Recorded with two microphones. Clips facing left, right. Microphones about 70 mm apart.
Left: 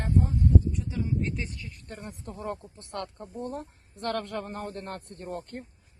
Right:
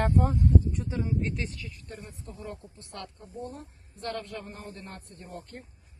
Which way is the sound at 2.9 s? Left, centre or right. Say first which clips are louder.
Left 6 dB; left.